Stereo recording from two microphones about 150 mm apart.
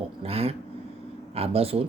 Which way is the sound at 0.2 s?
40° right (ahead or behind).